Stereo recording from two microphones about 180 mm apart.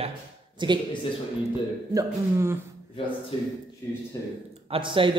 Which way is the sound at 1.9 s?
15° right (ahead or behind).